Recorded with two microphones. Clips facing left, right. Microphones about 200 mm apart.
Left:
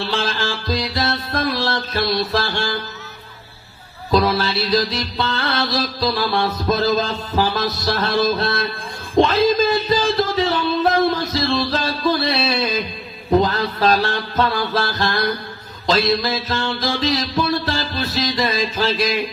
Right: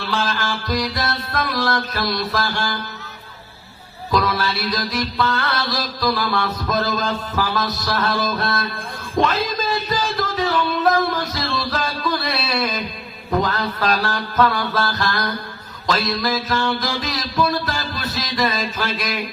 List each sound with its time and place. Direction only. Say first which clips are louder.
0.1 s music: left 1 dB; 30° left (ahead or behind)
4.1 s music: left 3 dB; 30° left (ahead or behind)